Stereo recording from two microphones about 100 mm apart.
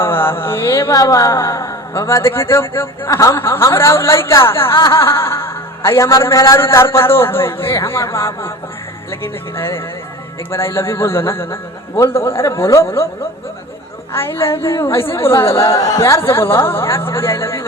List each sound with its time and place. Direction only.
0.0 s music: 25° left (ahead or behind)
0.9 s a man's voice: 35° left (ahead or behind)
14.1 s a man's voice: 25° left (ahead or behind)